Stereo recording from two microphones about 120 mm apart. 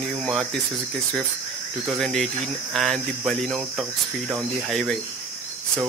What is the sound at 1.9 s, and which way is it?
Speech, centre (ahead or behind).